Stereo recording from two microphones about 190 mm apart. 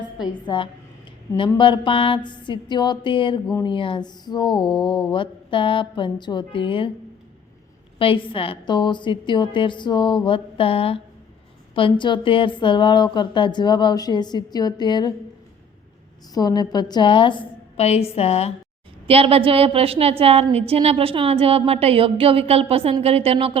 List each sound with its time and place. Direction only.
0.4 s a woman's voice: 25° left (ahead or behind)
7.9 s a woman's voice: 25° left (ahead or behind)
16.3 s a woman's voice: 20° left (ahead or behind)
19.0 s a woman's voice: 30° right (ahead or behind)